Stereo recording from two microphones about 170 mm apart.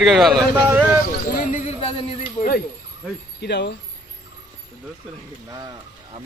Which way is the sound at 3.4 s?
85° left.